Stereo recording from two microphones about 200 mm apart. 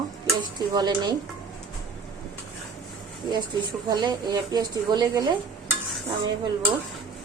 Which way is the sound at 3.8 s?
20° right (ahead or behind).